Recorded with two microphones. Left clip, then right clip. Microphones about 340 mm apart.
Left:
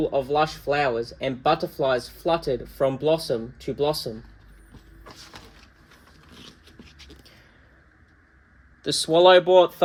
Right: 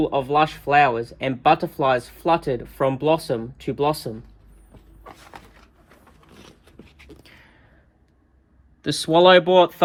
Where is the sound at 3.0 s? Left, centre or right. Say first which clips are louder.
Right 2 dB; right.